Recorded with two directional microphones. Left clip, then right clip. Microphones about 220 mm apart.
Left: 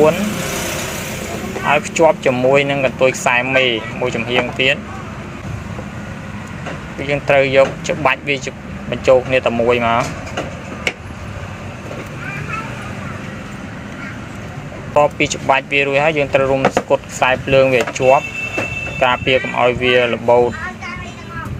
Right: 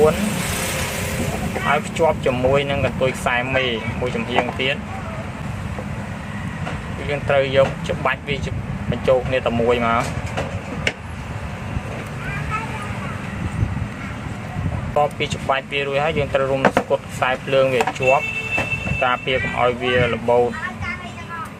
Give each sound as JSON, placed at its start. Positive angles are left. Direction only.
{"t": 1.6, "sound": "speech", "side_deg": 25}
{"t": 7.1, "sound": "speech", "side_deg": 25}
{"t": 14.9, "sound": "speech", "side_deg": 20}